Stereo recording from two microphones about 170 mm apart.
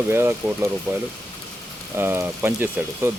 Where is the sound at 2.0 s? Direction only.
15° right (ahead or behind).